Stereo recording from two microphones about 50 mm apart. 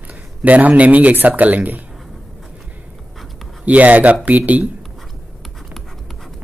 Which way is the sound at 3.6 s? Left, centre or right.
Right.